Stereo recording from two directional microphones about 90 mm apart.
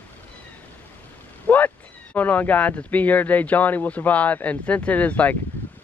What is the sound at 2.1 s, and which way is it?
Speech, 20° left (ahead or behind).